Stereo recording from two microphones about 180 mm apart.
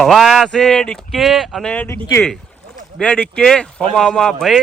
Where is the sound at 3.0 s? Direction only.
5° left (ahead or behind).